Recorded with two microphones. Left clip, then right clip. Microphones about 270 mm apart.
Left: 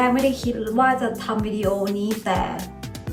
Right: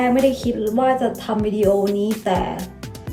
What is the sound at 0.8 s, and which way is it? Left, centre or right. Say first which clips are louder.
Speech: even; right.